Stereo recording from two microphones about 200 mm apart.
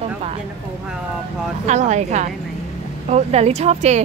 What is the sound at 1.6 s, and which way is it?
Speech, 35° right (ahead or behind).